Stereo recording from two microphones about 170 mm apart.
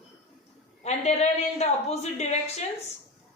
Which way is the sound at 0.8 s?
40° left (ahead or behind).